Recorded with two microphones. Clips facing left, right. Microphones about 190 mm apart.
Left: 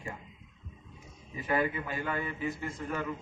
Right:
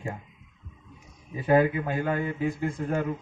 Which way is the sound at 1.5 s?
65° right (ahead or behind).